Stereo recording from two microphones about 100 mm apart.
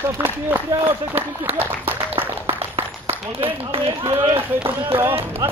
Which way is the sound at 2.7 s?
70° right (ahead or behind).